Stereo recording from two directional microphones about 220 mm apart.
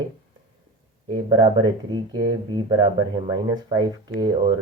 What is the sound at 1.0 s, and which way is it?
Speech, 20° right (ahead or behind).